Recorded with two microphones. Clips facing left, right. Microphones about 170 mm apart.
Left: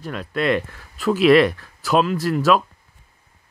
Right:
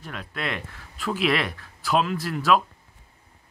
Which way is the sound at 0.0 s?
40° left (ahead or behind).